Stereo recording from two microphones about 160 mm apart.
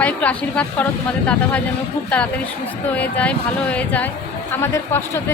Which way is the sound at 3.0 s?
10° left (ahead or behind).